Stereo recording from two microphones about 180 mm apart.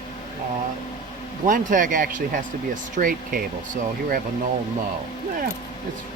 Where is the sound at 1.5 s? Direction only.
45° right (ahead or behind).